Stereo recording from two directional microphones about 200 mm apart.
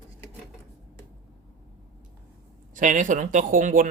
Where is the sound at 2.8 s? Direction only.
40° right (ahead or behind).